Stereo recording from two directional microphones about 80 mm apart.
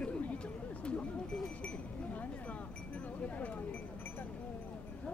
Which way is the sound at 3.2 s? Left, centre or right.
Centre.